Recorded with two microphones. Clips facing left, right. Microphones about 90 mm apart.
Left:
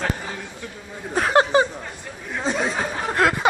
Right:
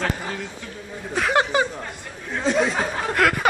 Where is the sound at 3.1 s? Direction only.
25° left (ahead or behind).